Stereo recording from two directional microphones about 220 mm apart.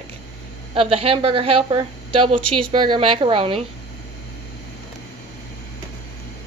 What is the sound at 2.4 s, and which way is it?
Speech, 90° right.